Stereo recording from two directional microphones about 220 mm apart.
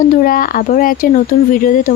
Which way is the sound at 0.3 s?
40° left (ahead or behind).